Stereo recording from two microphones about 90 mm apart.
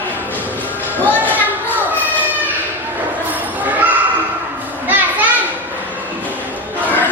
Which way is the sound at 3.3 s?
20° right (ahead or behind).